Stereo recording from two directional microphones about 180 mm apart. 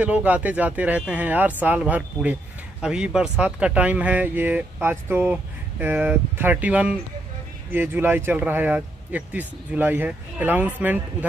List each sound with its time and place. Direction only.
0.0 s speech: 5° right (ahead or behind)